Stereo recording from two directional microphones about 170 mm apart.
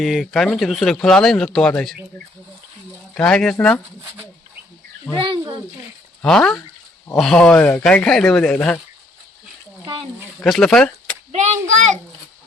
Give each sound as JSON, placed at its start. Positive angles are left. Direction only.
{"t": 0.0, "sound": "speech", "side_deg": 0}
{"t": 3.2, "sound": "speech", "side_deg": 5}
{"t": 5.1, "sound": "speech", "side_deg": 5}
{"t": 6.2, "sound": "speech", "side_deg": 5}
{"t": 9.8, "sound": "a sound", "side_deg": -30}
{"t": 10.4, "sound": "speech", "side_deg": 5}
{"t": 11.3, "sound": "a child's voice", "side_deg": -45}